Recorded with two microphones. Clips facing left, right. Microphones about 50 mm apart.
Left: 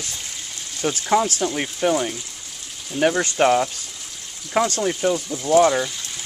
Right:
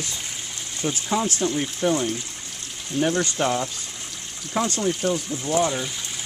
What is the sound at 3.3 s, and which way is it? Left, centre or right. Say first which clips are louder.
Speech: left 6 dB; left.